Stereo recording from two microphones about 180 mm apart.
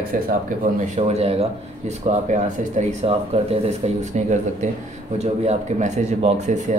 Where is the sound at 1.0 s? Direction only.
35° right (ahead or behind).